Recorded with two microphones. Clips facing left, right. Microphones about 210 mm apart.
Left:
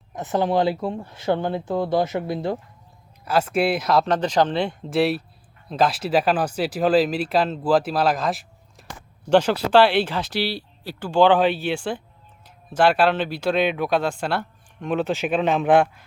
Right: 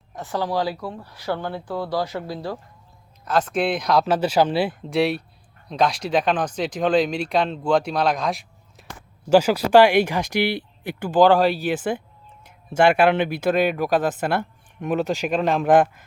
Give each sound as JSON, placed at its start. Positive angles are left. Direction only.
{"t": 0.2, "sound": "speech", "side_deg": 20}
{"t": 3.2, "sound": "speech", "side_deg": 10}
{"t": 11.1, "sound": "speech", "side_deg": 0}